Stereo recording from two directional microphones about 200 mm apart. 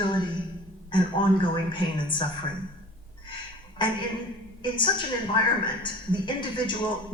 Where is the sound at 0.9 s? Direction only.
25° left (ahead or behind).